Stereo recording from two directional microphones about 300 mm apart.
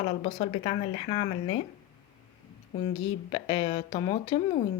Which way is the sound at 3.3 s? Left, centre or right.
Centre.